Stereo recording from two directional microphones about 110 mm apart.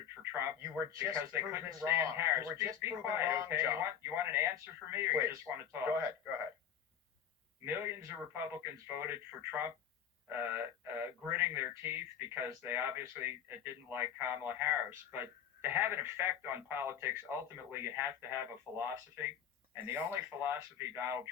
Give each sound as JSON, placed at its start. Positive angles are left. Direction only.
{"t": 0.2, "sound": "speech", "side_deg": -20}
{"t": 7.6, "sound": "speech", "side_deg": -20}